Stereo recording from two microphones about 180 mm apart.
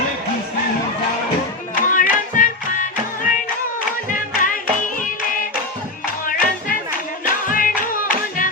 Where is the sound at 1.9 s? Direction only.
50° left (ahead or behind).